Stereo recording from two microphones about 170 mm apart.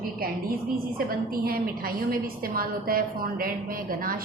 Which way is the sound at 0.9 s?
60° right (ahead or behind).